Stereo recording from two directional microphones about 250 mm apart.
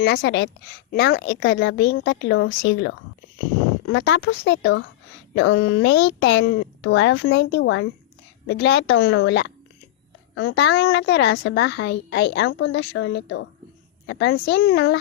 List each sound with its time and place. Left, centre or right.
0.0 s a woman's voice: left